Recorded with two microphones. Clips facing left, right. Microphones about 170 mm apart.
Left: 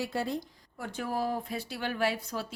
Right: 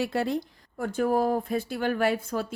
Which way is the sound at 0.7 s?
50° right (ahead or behind).